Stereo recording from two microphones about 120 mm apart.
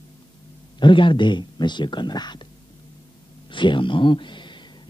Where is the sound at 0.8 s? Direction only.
45° left (ahead or behind).